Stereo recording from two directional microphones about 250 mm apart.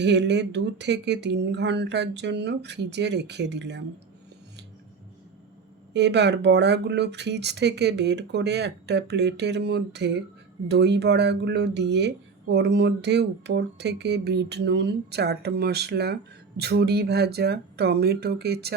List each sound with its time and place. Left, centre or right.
0.0 s speech: right
5.9 s speech: right